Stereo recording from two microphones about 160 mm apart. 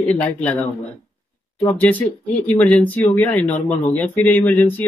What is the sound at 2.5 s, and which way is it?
Speech, 10° left (ahead or behind).